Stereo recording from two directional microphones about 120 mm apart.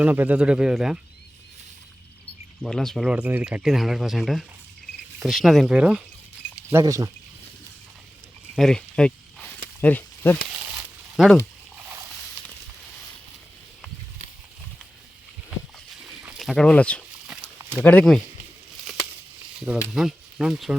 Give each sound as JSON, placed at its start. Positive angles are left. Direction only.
{"t": 0.0, "sound": "speech", "side_deg": -15}
{"t": 2.6, "sound": "speech", "side_deg": 5}
{"t": 3.1, "sound": "speech", "side_deg": -15}
{"t": 5.7, "sound": "speech", "side_deg": -10}
{"t": 6.7, "sound": "speech", "side_deg": -25}
{"t": 8.5, "sound": "a sound", "side_deg": 5}
{"t": 11.2, "sound": "speech", "side_deg": -5}
{"t": 16.4, "sound": "speech", "side_deg": 5}
{"t": 17.6, "sound": "a sound", "side_deg": -20}
{"t": 19.5, "sound": "speech", "side_deg": -5}